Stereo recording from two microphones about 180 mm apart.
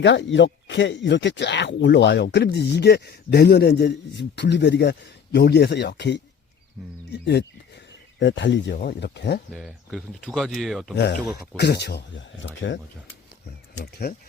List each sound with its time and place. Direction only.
0.0 s speech: 85° left; by 7.4 s 70° left (ahead or behind)
8.2 s speech: 80° left; by 9.4 s 65° left (ahead or behind)
9.5 s speech: centre (ahead or behind)
10.9 s speech: 70° left (ahead or behind); by 12.5 s 90° left